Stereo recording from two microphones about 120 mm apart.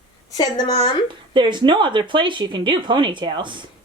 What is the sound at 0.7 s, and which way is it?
Speech, 55° left (ahead or behind).